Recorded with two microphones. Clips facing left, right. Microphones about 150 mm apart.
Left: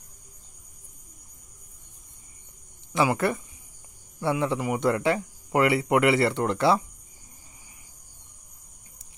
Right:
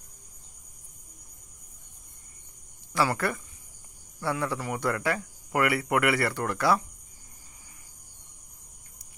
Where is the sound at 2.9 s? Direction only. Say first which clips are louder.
Left 3 dB; 20° left (ahead or behind).